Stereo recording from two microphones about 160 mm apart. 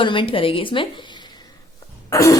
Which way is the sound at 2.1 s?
20° left (ahead or behind).